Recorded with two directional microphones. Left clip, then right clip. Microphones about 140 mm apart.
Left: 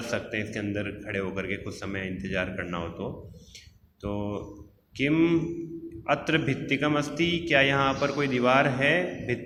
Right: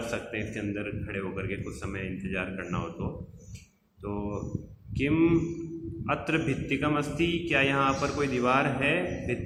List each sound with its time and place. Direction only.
0.1 s a man's voice: 30° left (ahead or behind)
4.0 s a man's voice: 25° left (ahead or behind)